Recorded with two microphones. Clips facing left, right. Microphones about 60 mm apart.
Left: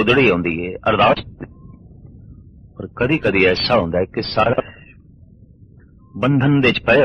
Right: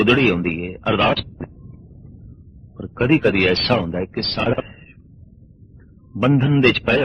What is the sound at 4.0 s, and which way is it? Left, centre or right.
Speech, left.